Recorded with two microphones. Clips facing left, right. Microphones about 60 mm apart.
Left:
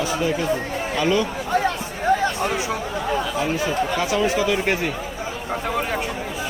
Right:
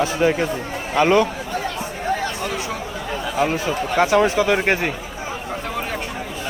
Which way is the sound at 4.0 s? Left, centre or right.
Right.